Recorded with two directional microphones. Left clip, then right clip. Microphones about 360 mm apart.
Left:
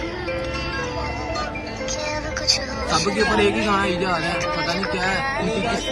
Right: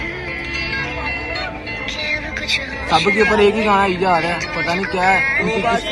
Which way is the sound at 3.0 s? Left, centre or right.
Centre.